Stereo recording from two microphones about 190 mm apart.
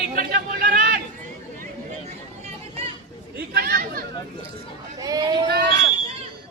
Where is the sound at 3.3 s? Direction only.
55° right (ahead or behind).